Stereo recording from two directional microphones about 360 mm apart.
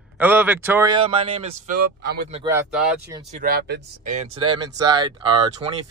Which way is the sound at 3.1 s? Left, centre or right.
Centre.